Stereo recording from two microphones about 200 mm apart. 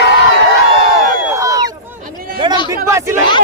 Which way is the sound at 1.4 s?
15° right (ahead or behind).